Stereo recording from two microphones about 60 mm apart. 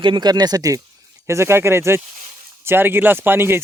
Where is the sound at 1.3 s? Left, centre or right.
Right.